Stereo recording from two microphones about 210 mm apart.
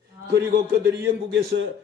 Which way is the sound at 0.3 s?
55° right (ahead or behind).